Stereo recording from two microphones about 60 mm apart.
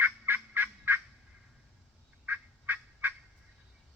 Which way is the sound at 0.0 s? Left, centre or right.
Right.